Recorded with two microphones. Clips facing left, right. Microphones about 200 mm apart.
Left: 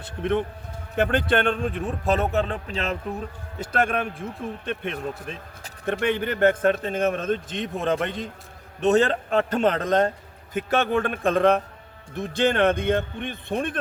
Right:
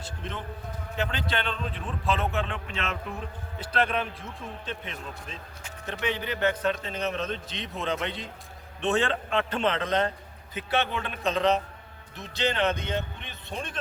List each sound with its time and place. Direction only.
0.0 s a man's voice: 60° left (ahead or behind); by 3.2 s 35° left (ahead or behind)
3.6 s a man's voice: 50° left (ahead or behind)